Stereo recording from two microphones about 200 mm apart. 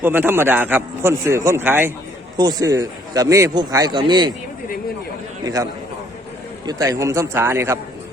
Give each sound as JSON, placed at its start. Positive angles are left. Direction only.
{"t": 0.0, "sound": "a man's voice", "side_deg": -10}
{"t": 6.7, "sound": "a man's voice", "side_deg": -15}